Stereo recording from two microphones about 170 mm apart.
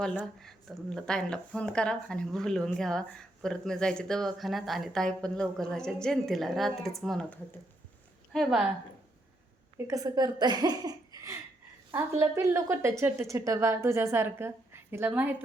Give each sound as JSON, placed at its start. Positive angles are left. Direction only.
{"t": 0.2, "sound": "a woman's voice", "side_deg": 0}
{"t": 9.7, "sound": "a woman's voice", "side_deg": -20}
{"t": 13.2, "sound": "a woman's voice", "side_deg": -20}